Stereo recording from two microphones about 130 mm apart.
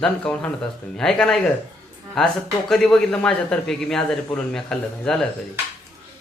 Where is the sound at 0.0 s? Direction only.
10° left (ahead or behind).